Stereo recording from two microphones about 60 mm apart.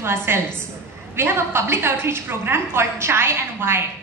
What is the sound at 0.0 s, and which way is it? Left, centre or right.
A woman's voice, right.